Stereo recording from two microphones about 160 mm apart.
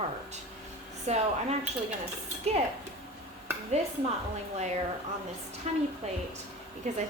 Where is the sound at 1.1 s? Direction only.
45° right (ahead or behind).